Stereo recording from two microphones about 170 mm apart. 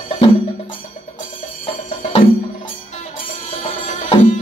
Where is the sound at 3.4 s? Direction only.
35° left (ahead or behind).